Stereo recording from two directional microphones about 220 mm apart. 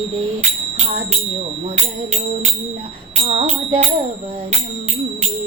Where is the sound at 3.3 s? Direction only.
25° right (ahead or behind).